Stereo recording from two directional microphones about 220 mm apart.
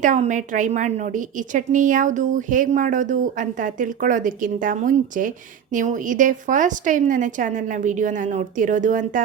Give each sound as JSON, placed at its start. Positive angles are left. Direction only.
{"t": 0.0, "sound": "a woman's voice", "side_deg": -35}